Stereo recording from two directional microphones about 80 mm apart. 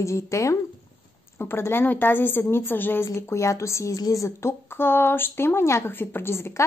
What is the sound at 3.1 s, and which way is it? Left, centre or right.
Speech, left.